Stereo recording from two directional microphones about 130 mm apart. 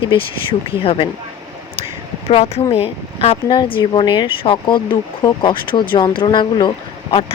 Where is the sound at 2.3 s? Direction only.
50° left (ahead or behind).